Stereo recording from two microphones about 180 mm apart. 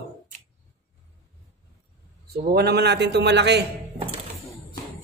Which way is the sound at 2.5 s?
65° right (ahead or behind).